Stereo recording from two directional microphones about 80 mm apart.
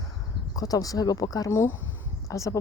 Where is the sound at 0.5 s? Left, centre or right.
Left.